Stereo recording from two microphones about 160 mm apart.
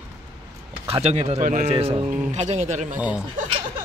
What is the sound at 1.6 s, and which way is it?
Speech, 35° right (ahead or behind).